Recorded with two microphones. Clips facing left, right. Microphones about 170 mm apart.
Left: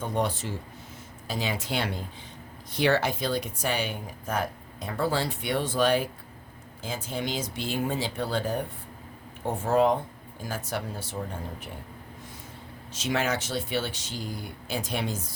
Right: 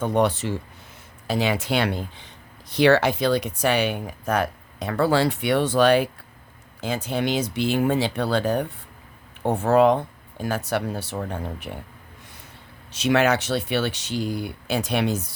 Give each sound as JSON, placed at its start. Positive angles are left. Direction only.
{"t": 0.0, "sound": "speech", "side_deg": -70}
{"t": 12.9, "sound": "speech", "side_deg": -70}